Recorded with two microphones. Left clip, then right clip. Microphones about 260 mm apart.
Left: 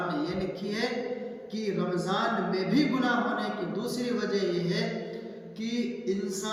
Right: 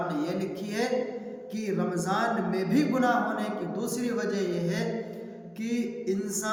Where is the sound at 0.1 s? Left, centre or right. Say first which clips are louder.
Right 1 dB; centre.